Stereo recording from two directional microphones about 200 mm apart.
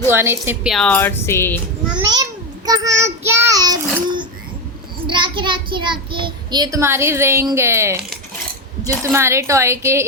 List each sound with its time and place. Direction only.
0.1 s speech: 10° right (ahead or behind)
0.7 s speech: 5° left (ahead or behind)
2.0 s a child's voice: 20° right (ahead or behind)
4.0 s a sound: 25° right (ahead or behind)
5.0 s a child's voice: 25° right (ahead or behind)